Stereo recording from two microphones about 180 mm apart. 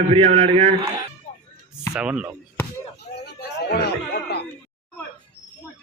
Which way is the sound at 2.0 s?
5° right (ahead or behind).